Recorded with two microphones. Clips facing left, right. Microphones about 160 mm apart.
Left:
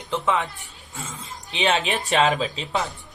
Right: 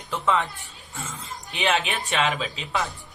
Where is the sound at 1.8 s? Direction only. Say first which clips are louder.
Left 5 dB; 40° left (ahead or behind).